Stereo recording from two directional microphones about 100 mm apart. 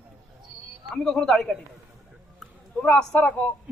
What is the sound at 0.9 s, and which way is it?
A man's voice, 5° left (ahead or behind).